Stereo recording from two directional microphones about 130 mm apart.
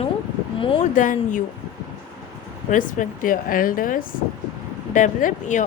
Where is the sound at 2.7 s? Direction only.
85° left.